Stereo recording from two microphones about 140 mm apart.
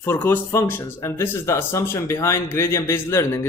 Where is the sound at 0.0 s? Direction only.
15° left (ahead or behind).